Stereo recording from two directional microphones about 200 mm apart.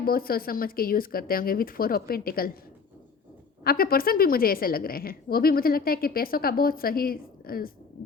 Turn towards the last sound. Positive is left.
turn(degrees=50)  # may be behind; listen again after turning